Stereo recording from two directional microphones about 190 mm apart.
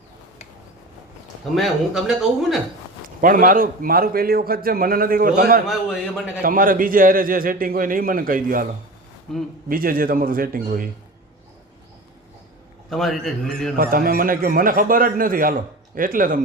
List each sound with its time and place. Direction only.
1.5 s speech: centre (ahead or behind)
3.2 s speech: 45° right (ahead or behind)
5.6 s speech: 5° right (ahead or behind)
6.4 s speech: 45° right (ahead or behind)
9.3 s speech: centre (ahead or behind)
9.6 s speech: 50° right (ahead or behind)
12.9 s speech: centre (ahead or behind)
13.7 s speech: 50° right (ahead or behind)